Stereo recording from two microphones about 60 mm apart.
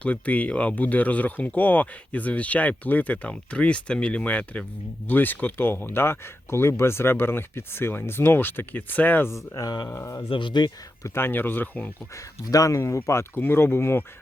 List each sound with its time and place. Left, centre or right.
0.0 s speech: left
9.2 s speech: left
11.1 s speech: left
12.1 s speech: left
13.1 s speech: left
13.4 s speech: left